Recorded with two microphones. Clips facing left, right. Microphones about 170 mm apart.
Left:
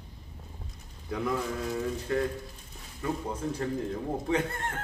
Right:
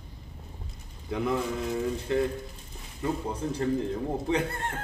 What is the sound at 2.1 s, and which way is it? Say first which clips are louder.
Speech: right 2 dB; 20° right (ahead or behind).